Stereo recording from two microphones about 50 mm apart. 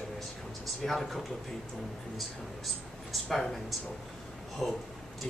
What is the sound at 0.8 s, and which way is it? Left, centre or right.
Speech, centre.